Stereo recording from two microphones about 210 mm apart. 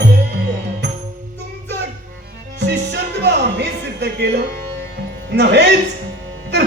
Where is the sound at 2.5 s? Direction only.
55° right (ahead or behind).